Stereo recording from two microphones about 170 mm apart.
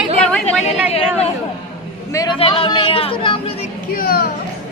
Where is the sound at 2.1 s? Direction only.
20° left (ahead or behind).